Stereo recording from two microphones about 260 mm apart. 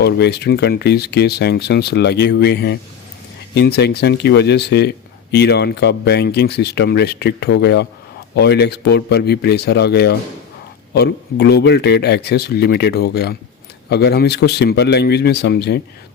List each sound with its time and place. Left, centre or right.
0.0 s speech: left